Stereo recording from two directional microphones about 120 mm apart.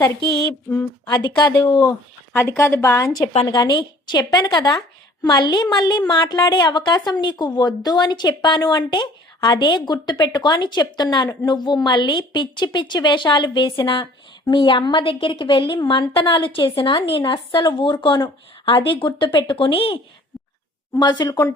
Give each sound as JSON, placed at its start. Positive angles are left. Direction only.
{"t": 1.0, "sound": "a woman's voice", "side_deg": 35}
{"t": 21.0, "sound": "a woman's voice", "side_deg": 35}